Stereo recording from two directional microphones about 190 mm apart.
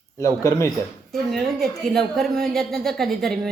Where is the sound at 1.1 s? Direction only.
Centre (ahead or behind).